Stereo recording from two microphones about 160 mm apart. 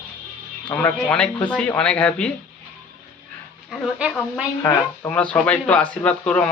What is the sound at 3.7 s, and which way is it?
Speech, 5° right (ahead or behind).